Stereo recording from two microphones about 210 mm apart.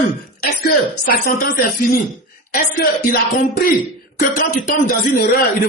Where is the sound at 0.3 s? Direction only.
45° left (ahead or behind).